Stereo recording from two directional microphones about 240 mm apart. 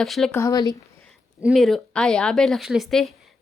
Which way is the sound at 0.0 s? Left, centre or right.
Centre.